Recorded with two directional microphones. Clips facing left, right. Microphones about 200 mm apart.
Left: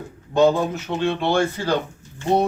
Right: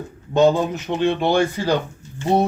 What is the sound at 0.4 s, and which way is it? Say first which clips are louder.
A man's voice: right 1 dB; 15° right (ahead or behind).